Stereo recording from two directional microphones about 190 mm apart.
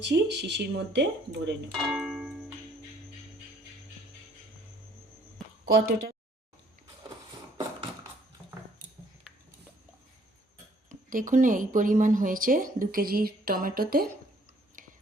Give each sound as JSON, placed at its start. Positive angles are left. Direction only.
{"t": 0.0, "sound": "speech", "side_deg": -65}
{"t": 1.9, "sound": "a sound", "side_deg": 0}
{"t": 5.6, "sound": "speech", "side_deg": -50}
{"t": 10.8, "sound": "speech", "side_deg": -45}
{"t": 14.8, "sound": "whispering", "side_deg": -45}